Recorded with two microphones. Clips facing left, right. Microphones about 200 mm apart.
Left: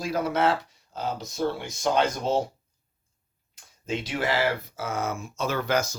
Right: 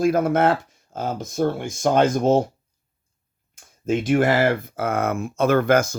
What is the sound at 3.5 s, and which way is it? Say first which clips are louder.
Speech: right 8 dB; 50° right (ahead or behind).